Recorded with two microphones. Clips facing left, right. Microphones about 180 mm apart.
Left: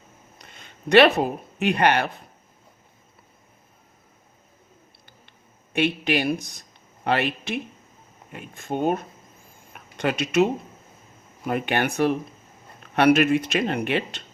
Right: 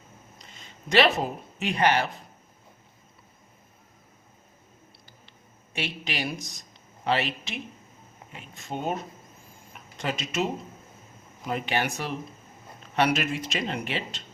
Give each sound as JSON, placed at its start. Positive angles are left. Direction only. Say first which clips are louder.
{"t": 0.3, "sound": "a sound", "louder": "left 1 dB", "side_deg": 60}
{"t": 1.5, "sound": "speech", "louder": "left 3 dB", "side_deg": 60}
{"t": 5.7, "sound": "speech", "louder": "left 10 dB", "side_deg": 60}
{"t": 10.0, "sound": "speech", "louder": "left 8 dB", "side_deg": 65}
{"t": 11.4, "sound": "speech", "louder": "left 4 dB", "side_deg": 60}